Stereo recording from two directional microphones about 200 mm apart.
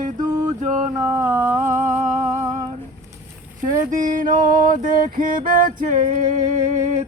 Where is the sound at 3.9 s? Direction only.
40° right (ahead or behind).